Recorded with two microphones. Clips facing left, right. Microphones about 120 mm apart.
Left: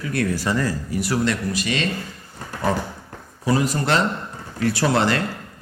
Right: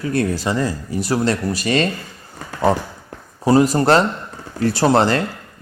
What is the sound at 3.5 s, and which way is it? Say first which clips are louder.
A man's voice: right 7 dB; 35° right (ahead or behind).